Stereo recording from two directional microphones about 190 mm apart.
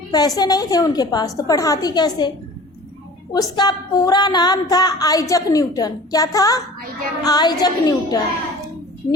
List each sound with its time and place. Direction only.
0.1 s a woman's voice: 20° left (ahead or behind)
3.3 s a woman's voice: 20° left (ahead or behind)